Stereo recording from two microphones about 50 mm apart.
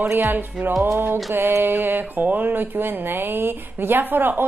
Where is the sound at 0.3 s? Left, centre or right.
Right.